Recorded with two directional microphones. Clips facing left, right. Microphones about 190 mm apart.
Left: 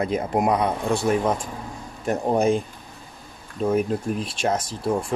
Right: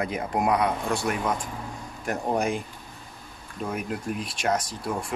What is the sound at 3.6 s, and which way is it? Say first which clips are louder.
Speech: left 8 dB; 30° left (ahead or behind).